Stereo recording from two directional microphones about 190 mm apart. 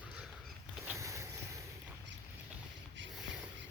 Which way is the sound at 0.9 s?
15° right (ahead or behind).